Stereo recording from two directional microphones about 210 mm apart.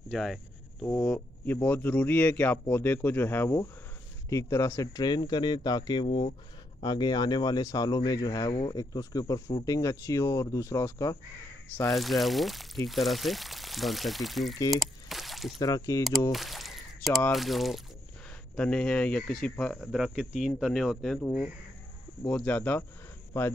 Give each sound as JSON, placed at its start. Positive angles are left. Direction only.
{"t": 0.1, "sound": "a sound", "side_deg": 0}
{"t": 0.8, "sound": "speech", "side_deg": 5}
{"t": 11.9, "sound": "speech", "side_deg": 0}
{"t": 14.7, "sound": "a sound", "side_deg": 0}
{"t": 15.6, "sound": "speech", "side_deg": 15}
{"t": 16.3, "sound": "speech", "side_deg": 0}